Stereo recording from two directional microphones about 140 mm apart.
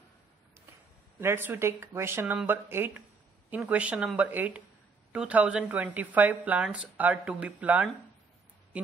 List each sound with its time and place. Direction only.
1.2 s a woman's voice: 15° right (ahead or behind)